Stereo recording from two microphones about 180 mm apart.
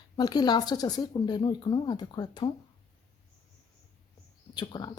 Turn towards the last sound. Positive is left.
turn(degrees=25)  # may be behind; listen again after turning